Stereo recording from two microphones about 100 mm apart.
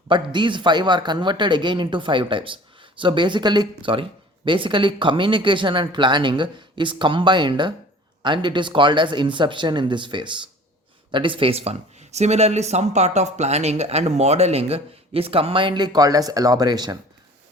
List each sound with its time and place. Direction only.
0.1 s speech: 50° right (ahead or behind)